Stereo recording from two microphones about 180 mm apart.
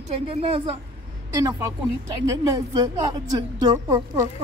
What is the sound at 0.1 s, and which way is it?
Speech, 30° right (ahead or behind).